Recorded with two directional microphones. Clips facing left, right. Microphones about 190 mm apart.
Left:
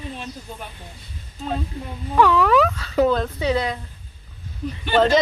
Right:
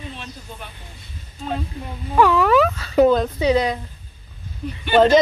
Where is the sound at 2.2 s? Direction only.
5° right (ahead or behind).